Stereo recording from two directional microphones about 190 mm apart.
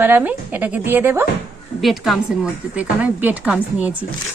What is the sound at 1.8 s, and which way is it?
A woman's voice, centre (ahead or behind).